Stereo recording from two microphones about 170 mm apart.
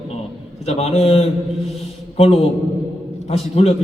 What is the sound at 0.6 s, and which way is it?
A man's voice, 40° left (ahead or behind).